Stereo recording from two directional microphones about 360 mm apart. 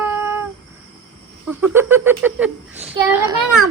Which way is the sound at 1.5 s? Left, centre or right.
Centre.